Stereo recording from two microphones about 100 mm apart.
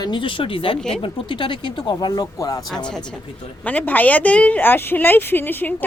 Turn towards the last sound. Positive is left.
turn(degrees=20)  # may be behind; listen again after turning